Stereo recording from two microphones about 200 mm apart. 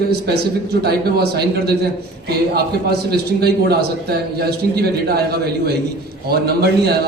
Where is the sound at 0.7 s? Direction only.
55° right (ahead or behind).